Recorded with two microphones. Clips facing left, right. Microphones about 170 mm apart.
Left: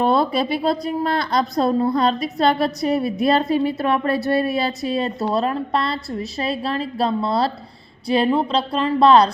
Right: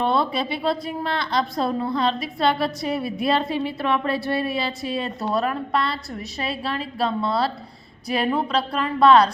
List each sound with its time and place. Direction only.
0.0 s a woman's voice: 40° left (ahead or behind)